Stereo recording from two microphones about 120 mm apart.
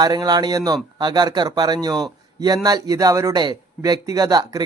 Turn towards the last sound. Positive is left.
turn(degrees=-35)  # may be behind; listen again after turning